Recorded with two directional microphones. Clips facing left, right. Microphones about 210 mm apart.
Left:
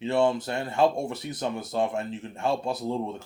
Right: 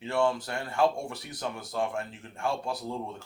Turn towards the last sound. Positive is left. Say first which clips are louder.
# left 5 dB
turn(degrees=25)  # may be behind; listen again after turning